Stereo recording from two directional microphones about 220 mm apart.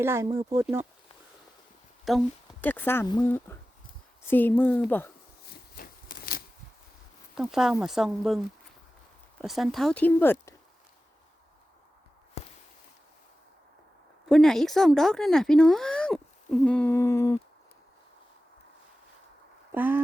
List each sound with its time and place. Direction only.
0.0 s speech: 10° right (ahead or behind)
2.0 s speech: 5° left (ahead or behind)
5.7 s a sound: 40° left (ahead or behind)
7.3 s speech: centre (ahead or behind)
9.4 s speech: centre (ahead or behind)
14.3 s speech: centre (ahead or behind)
19.7 s speech: 10° right (ahead or behind)